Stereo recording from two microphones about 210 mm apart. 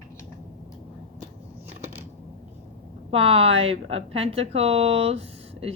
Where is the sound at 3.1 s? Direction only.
25° right (ahead or behind).